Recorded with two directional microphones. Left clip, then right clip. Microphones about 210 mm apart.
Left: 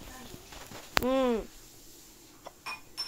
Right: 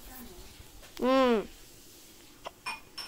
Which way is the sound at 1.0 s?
25° right (ahead or behind).